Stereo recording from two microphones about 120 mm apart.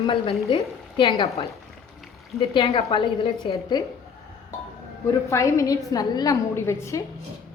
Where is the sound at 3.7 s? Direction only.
35° left (ahead or behind).